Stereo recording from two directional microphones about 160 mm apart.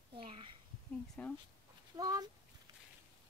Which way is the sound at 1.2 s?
5° left (ahead or behind).